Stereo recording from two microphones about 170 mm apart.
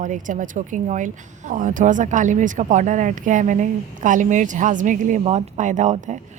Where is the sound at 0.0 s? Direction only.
50° right (ahead or behind).